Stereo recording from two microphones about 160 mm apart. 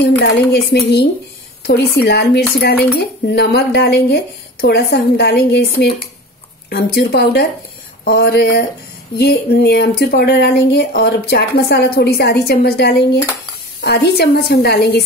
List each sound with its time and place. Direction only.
0.0 s a woman's voice: 90° left
10.9 s a woman's voice: 70° left (ahead or behind); by 15.0 s 90° left